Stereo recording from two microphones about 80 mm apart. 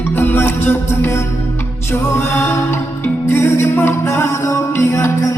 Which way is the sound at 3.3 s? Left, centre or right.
Left.